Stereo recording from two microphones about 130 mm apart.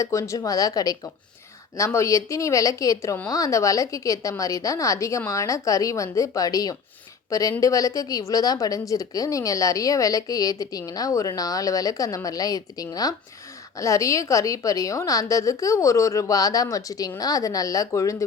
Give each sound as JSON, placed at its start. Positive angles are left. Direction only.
{"t": 0.0, "sound": "speech", "side_deg": 25}